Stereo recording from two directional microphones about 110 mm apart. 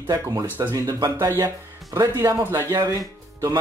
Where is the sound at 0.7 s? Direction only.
30° right (ahead or behind).